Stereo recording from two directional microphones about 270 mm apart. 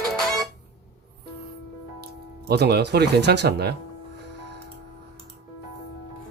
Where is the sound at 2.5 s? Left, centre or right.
Right.